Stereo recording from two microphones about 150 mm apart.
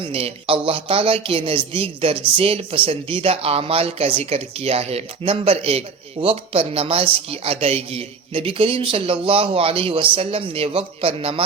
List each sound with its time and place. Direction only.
0.0 s speech: 40° right (ahead or behind)